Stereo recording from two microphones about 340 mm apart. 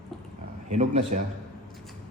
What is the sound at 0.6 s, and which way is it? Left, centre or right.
Speech, centre.